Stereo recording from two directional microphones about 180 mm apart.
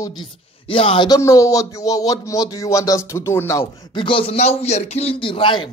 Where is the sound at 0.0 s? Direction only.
25° left (ahead or behind).